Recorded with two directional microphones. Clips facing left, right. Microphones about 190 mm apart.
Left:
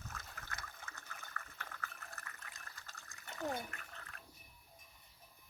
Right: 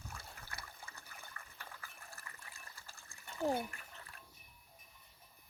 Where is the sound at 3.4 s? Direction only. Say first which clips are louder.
Right 6 dB; 30° right (ahead or behind).